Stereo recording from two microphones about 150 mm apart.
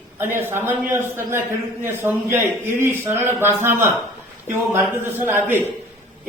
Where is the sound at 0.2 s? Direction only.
15° right (ahead or behind).